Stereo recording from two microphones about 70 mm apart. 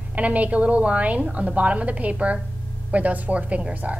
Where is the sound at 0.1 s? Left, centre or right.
Centre.